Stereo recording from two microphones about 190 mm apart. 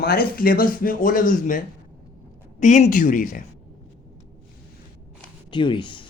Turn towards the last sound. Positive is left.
turn(degrees=25)  # may be behind; listen again after turning